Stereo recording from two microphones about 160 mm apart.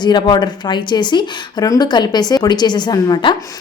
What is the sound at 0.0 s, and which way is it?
A woman's voice, 25° left (ahead or behind).